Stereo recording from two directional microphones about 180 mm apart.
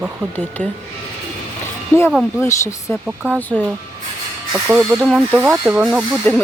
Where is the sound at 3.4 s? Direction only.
10° left (ahead or behind).